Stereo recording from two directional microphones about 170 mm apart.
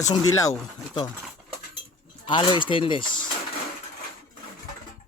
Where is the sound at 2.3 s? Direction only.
25° left (ahead or behind).